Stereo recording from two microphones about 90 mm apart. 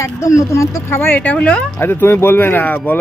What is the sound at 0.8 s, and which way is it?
Speech, 25° left (ahead or behind).